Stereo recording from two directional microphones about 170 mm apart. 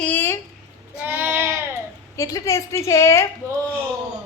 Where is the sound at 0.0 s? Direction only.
10° left (ahead or behind).